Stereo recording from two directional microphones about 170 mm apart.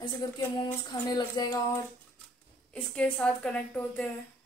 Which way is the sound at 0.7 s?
20° left (ahead or behind).